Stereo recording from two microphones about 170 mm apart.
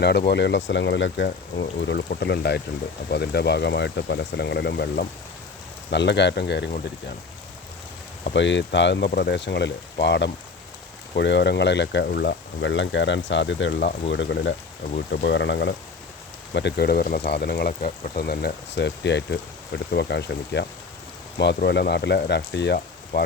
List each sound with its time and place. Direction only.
0.3 s speech: 90° left
2.0 s speech: 75° left (ahead or behind)
5.9 s speech: 90° left
8.3 s speech: 90° left
9.1 s speech: 80° left
14.9 s speech: 70° left (ahead or behind); by 20.7 s 85° left
21.3 s speech: 75° left (ahead or behind)